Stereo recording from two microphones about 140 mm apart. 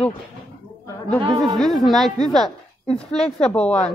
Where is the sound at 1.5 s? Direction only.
Centre (ahead or behind).